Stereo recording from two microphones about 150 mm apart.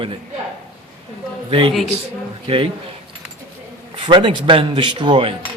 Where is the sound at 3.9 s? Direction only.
35° right (ahead or behind).